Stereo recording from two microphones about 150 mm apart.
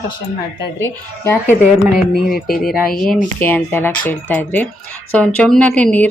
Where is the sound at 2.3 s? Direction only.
75° left (ahead or behind).